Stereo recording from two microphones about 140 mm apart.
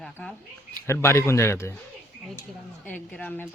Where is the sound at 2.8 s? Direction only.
10° left (ahead or behind).